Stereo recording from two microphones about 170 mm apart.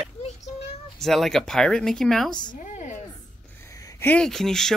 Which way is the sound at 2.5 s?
45° left (ahead or behind).